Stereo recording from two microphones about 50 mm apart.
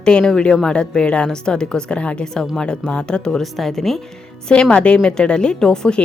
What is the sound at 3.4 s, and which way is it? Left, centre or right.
Speech, centre.